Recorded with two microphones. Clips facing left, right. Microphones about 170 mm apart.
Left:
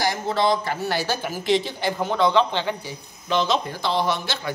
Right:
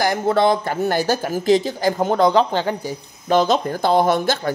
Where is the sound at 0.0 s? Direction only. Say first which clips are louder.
Right 5 dB; 55° right (ahead or behind).